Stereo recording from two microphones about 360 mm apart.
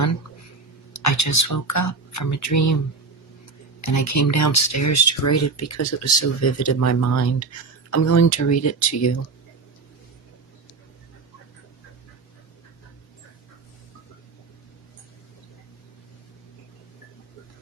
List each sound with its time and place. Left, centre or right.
0.9 s speech: left
3.8 s speech: left